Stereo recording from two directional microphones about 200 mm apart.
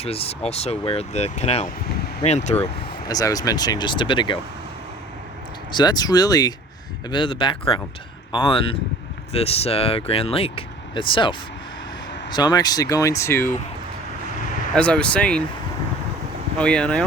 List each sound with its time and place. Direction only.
0.0 s speech: 30° left (ahead or behind)
3.1 s speech: 20° left (ahead or behind)
5.7 s speech: 20° left (ahead or behind)
14.7 s speech: 5° left (ahead or behind)
16.6 s speech: 5° left (ahead or behind)